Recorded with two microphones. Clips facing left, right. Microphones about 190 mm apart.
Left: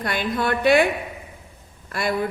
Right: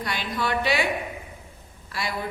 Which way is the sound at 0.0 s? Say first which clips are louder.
Left 5 dB; 55° left (ahead or behind).